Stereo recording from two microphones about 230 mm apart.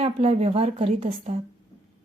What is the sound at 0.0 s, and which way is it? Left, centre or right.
A woman's voice, right.